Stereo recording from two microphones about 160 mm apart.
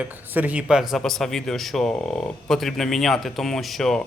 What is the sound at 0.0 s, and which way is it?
A man's voice, 10° right (ahead or behind).